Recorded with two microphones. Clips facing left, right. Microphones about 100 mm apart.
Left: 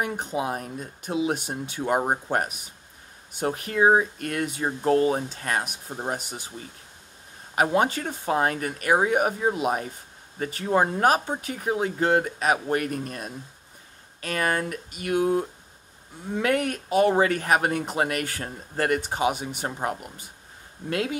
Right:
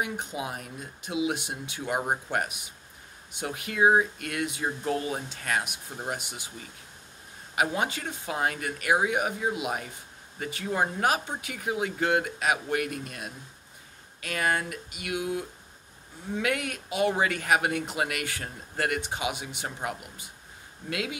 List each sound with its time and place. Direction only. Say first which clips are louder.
0.0 s speech: left 5 dB; 45° left (ahead or behind)